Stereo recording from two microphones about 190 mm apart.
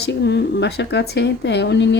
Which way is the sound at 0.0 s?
65° left (ahead or behind).